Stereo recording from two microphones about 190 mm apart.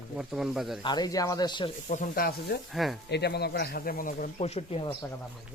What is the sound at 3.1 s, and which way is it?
Speech, 60° left (ahead or behind).